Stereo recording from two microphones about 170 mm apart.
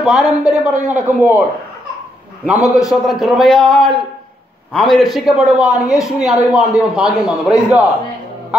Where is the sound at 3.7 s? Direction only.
30° left (ahead or behind).